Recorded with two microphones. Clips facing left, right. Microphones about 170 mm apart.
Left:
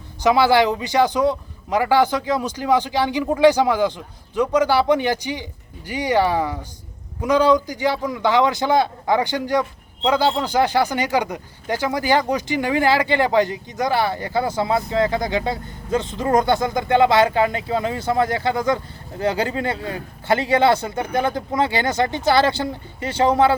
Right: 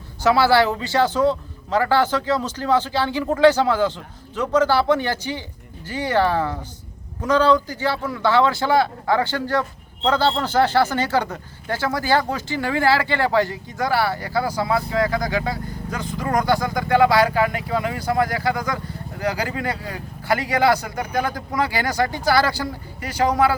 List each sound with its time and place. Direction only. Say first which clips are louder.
0.2 s a man's voice: left 1 dB; 15° left (ahead or behind)